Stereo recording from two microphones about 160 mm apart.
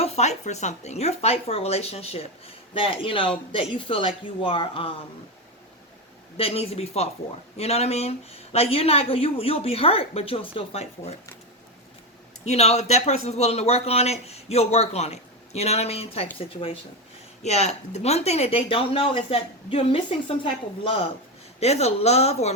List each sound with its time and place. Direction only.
0.0 s speech: 45° left (ahead or behind)
6.3 s speech: 40° left (ahead or behind)
12.5 s speech: 40° left (ahead or behind)
17.4 s speech: 40° left (ahead or behind)